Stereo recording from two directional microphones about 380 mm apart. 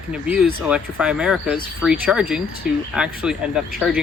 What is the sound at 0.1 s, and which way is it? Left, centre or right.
Speech, centre.